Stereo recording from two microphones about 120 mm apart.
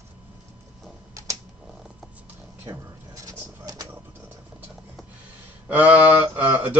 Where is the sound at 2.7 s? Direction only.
30° right (ahead or behind).